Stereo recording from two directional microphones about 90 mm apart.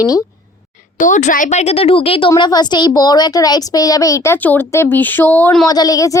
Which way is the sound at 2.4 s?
50° left (ahead or behind).